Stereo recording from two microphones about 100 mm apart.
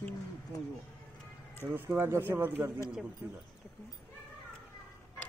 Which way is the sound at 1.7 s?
20° right (ahead or behind).